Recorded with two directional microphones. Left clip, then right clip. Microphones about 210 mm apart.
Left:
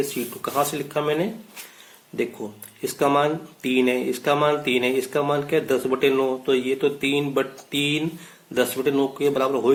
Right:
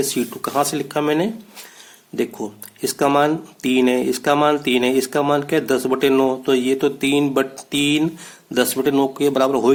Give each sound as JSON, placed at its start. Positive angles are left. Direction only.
{"t": 0.1, "sound": "speech", "side_deg": -40}
{"t": 2.8, "sound": "speech", "side_deg": -40}